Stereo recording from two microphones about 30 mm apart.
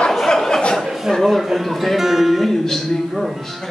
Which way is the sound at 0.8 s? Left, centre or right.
Centre.